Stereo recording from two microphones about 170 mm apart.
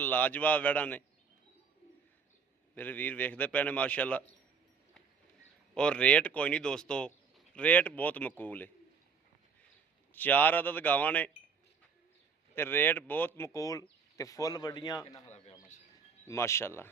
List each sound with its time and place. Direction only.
0.0 s speech: 10° left (ahead or behind)
2.7 s speech: 10° left (ahead or behind)
5.7 s speech: 5° left (ahead or behind)
10.1 s speech: 10° left (ahead or behind)
12.5 s speech: 10° left (ahead or behind)
16.2 s speech: 15° left (ahead or behind)